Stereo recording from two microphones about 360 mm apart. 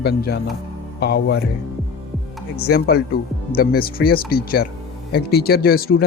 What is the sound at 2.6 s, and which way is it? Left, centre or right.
Speech, left.